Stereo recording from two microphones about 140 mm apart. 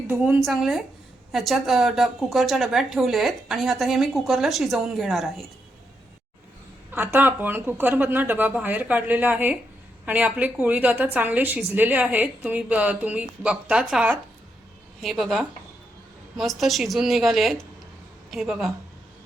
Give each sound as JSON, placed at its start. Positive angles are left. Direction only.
{"t": 0.1, "sound": "a woman's voice", "side_deg": -15}
{"t": 0.4, "sound": "a woman's voice", "side_deg": 0}
{"t": 6.9, "sound": "a woman's voice", "side_deg": -15}